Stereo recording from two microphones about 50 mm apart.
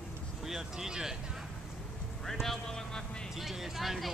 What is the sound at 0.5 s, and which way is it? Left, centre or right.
Speech, centre.